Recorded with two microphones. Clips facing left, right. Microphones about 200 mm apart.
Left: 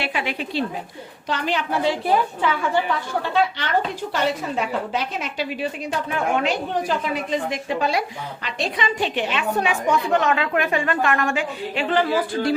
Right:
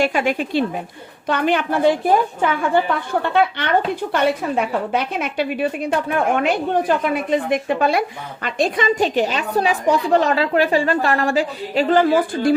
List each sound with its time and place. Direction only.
0.0 s a woman's voice: 45° right (ahead or behind)